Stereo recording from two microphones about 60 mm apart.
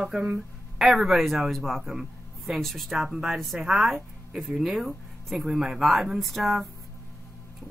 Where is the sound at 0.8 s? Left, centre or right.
Centre.